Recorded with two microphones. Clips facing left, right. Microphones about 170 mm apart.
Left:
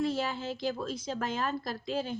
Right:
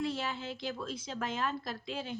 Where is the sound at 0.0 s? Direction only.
40° left (ahead or behind).